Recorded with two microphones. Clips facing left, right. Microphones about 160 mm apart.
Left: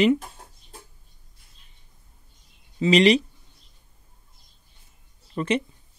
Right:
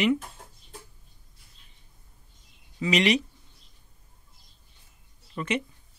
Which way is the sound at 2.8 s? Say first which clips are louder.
Left 6 dB; 30° left (ahead or behind).